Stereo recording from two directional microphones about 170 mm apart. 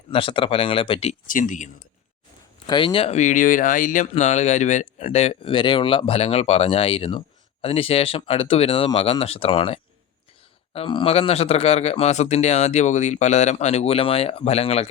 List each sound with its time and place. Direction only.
0.1 s speech: 30° left (ahead or behind)
1.3 s speech: 50° left (ahead or behind)
2.6 s speech: 30° left (ahead or behind)